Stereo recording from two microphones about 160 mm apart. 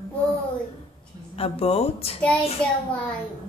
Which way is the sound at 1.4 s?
35° left (ahead or behind).